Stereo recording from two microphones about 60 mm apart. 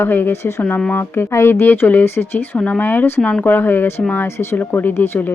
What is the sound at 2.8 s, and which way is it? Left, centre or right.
Speech, left.